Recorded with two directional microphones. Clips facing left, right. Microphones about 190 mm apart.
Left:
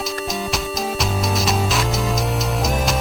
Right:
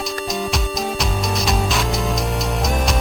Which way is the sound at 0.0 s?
Centre (ahead or behind).